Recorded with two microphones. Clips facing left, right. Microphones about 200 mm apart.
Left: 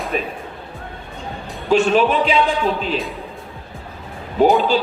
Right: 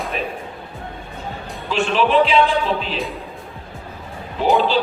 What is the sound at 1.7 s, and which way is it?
A man's voice, 45° left (ahead or behind).